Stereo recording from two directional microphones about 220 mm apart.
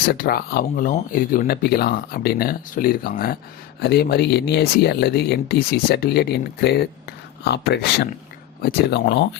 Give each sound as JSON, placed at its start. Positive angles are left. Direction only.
{"t": 0.0, "sound": "speech", "side_deg": 40}